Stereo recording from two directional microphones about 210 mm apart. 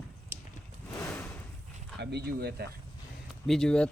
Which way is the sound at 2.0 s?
50° right (ahead or behind).